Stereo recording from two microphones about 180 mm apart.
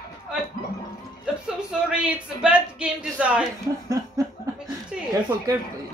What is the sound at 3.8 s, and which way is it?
Snicker, 20° right (ahead or behind).